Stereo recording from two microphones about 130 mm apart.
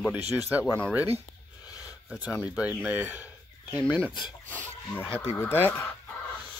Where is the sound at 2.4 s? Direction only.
10° right (ahead or behind).